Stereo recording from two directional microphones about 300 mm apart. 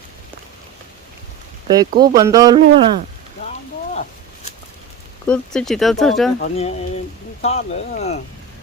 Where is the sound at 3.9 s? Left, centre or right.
Left.